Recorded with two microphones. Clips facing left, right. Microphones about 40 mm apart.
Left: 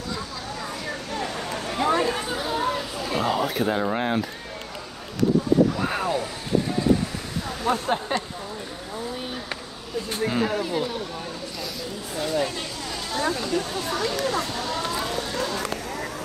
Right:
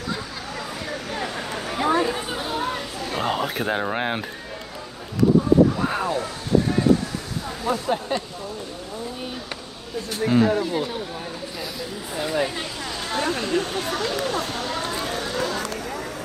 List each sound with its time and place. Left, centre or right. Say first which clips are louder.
1.1 s a sound: even; right
1.7 s chatter: right 1 dB; centre
3.2 s speech: left 1 dB; right
5.8 s vehicle: right 1 dB; centre
7.6 s speech: left 1 dB; left
10.2 s speech: right 6 dB; centre
12.2 s speech: right 1 dB; right
13.1 s speech: right 2 dB; right